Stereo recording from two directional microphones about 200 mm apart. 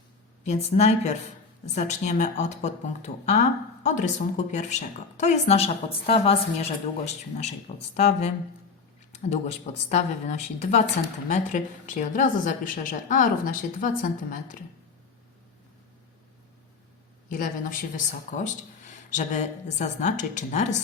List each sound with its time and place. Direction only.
0.4 s a woman's voice: 35° left (ahead or behind)
17.2 s a woman's voice: 45° left (ahead or behind)